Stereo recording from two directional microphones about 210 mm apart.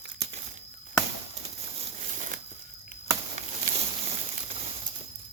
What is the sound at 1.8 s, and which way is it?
Crumpling, 30° right (ahead or behind).